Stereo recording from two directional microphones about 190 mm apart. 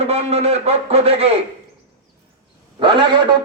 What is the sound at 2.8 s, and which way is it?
Speech, 25° right (ahead or behind).